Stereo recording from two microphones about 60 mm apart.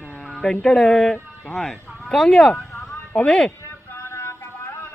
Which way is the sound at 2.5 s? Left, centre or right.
Left.